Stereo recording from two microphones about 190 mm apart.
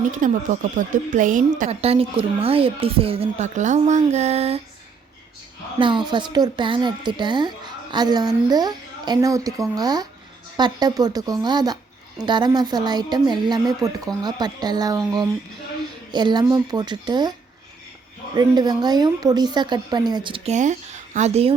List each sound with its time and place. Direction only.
0.1 s a woman's voice: 45° right (ahead or behind)
1.7 s speech: 30° right (ahead or behind)
5.8 s a woman's voice: 25° right (ahead or behind)
18.3 s a woman's voice: 20° right (ahead or behind)